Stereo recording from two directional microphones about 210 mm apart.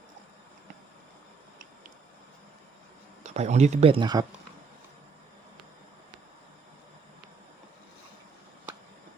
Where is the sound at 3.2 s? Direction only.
30° right (ahead or behind).